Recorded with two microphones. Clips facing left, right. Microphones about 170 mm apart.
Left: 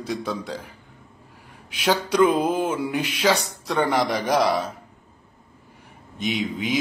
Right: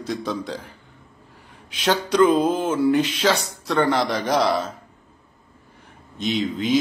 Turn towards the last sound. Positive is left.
turn(degrees=10)  # may be behind; listen again after turning